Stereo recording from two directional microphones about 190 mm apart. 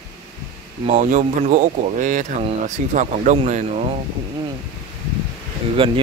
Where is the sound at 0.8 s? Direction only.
35° right (ahead or behind).